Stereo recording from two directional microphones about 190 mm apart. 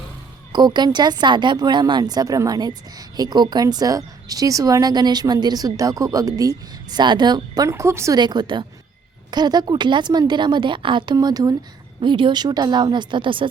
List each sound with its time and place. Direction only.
0.5 s speech: 20° right (ahead or behind)